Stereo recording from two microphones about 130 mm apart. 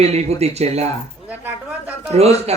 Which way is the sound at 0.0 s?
55° right (ahead or behind).